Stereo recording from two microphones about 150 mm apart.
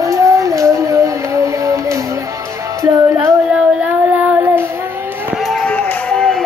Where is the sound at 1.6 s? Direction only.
20° right (ahead or behind).